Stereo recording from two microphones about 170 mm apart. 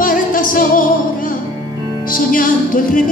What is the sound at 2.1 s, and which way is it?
Music, 55° left (ahead or behind).